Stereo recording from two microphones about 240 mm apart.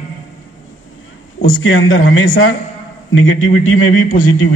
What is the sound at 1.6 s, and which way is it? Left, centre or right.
A man's voice, left.